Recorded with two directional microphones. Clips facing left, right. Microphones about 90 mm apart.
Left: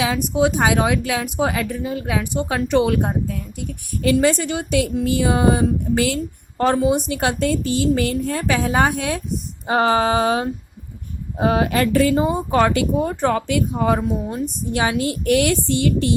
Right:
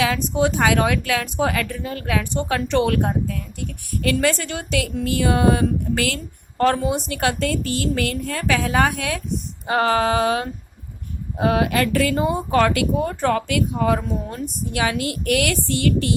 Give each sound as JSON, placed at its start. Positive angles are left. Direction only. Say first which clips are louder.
{"t": 0.0, "sound": "speech", "louder": "left 1 dB", "side_deg": 15}
{"t": 12.1, "sound": "speech", "louder": "left 1 dB", "side_deg": 15}